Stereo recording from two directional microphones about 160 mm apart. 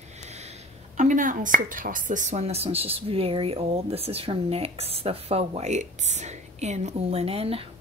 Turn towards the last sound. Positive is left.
turn(degrees=-35)  # may be behind; listen again after turning